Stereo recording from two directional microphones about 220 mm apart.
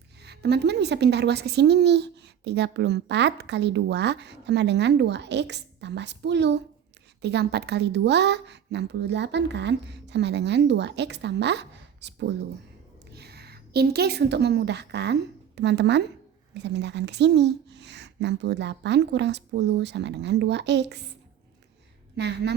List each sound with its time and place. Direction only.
0.2 s a woman's voice: 50° right (ahead or behind)
22.1 s a woman's voice: 50° right (ahead or behind)